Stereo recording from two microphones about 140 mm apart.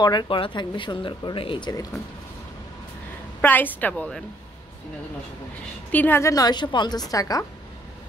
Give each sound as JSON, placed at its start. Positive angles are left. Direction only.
{"t": 0.0, "sound": "speech", "side_deg": 30}
{"t": 3.3, "sound": "a woman's voice", "side_deg": 15}
{"t": 5.9, "sound": "a woman's voice", "side_deg": 15}